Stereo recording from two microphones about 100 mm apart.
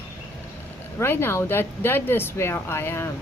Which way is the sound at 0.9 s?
25° left (ahead or behind).